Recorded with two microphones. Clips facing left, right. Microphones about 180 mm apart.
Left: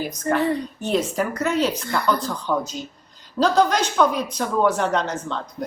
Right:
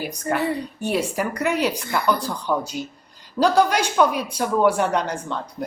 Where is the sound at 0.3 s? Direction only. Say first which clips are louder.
Left 2 dB; 10° right (ahead or behind).